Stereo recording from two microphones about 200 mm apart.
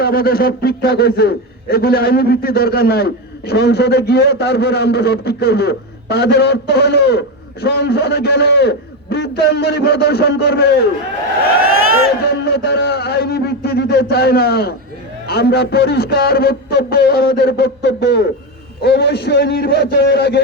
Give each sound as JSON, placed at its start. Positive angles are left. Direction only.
{"t": 0.0, "sound": "a man's voice", "side_deg": 50}
{"t": 12.3, "sound": "a man's voice", "side_deg": 55}